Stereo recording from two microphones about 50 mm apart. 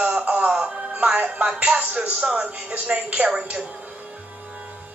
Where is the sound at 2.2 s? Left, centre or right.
Centre.